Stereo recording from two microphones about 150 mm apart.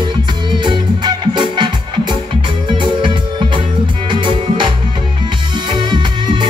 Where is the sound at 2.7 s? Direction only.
30° right (ahead or behind).